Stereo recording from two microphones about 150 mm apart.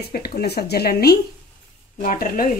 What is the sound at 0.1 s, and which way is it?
Speech, 90° left.